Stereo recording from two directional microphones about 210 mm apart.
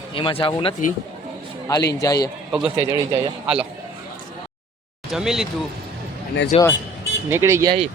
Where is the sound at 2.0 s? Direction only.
15° left (ahead or behind).